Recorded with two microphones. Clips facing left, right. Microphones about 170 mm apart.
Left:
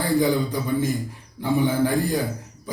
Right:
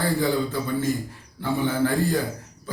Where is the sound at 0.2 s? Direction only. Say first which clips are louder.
Left 2 dB; 15° left (ahead or behind).